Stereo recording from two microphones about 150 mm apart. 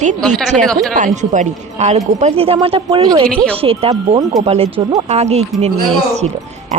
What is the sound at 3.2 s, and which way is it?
Speech, 5° left (ahead or behind).